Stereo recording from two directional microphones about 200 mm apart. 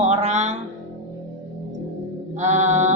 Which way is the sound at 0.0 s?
35° right (ahead or behind).